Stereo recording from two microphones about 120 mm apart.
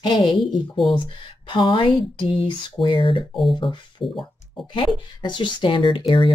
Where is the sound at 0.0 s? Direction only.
40° left (ahead or behind).